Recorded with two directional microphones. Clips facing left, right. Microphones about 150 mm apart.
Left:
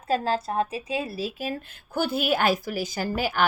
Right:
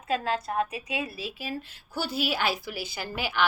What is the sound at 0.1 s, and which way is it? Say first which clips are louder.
A woman's voice: left 3 dB; 30° left (ahead or behind).